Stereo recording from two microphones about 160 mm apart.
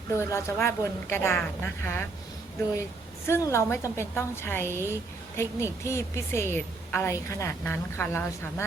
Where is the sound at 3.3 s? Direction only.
15° left (ahead or behind).